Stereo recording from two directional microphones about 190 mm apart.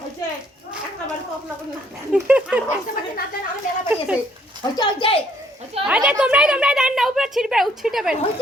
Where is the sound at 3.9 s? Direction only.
5° right (ahead or behind).